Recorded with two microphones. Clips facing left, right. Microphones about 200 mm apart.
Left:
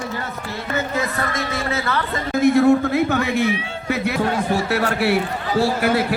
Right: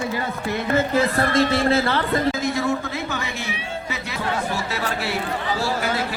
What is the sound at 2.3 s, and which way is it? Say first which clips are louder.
Speech: left 9 dB; 60° left (ahead or behind).